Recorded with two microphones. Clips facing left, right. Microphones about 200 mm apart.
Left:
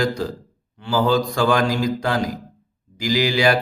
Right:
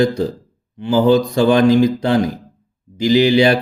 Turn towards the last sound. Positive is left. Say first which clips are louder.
# right 6 dB
turn(degrees=-25)  # may be behind; listen again after turning